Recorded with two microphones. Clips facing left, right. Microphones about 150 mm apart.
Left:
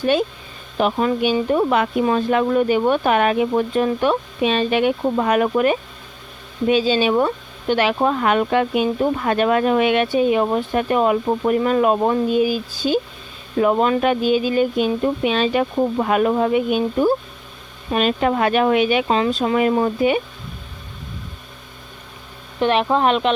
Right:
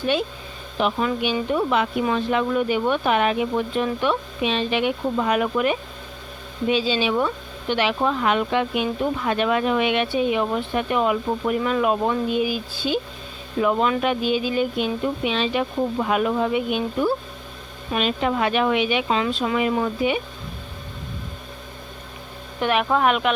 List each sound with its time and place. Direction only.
0.8 s speech: 40° left (ahead or behind)
22.6 s speech: 25° left (ahead or behind)